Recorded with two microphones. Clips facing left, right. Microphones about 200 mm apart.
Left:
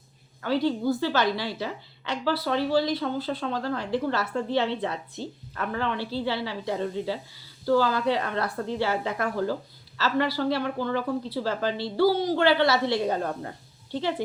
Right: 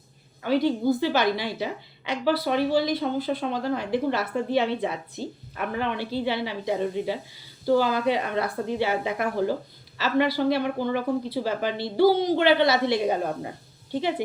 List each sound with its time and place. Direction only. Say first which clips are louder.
0.4 s a woman's voice: right 2 dB; 15° right (ahead or behind)